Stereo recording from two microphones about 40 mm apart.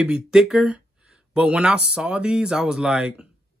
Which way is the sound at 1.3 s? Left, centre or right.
Right.